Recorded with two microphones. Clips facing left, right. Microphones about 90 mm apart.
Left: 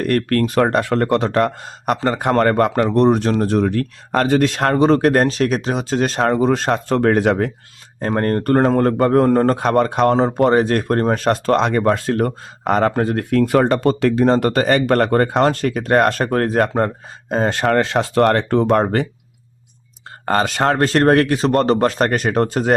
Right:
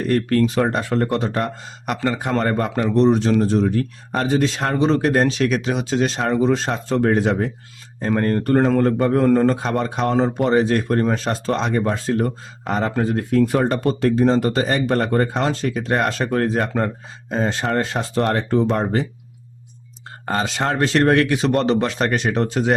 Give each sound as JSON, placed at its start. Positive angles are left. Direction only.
{"t": 0.0, "sound": "speech", "side_deg": 60}
{"t": 1.6, "sound": "speech", "side_deg": 45}
{"t": 2.1, "sound": "speech", "side_deg": 60}
{"t": 8.0, "sound": "speech", "side_deg": 50}
{"t": 20.2, "sound": "speech", "side_deg": 55}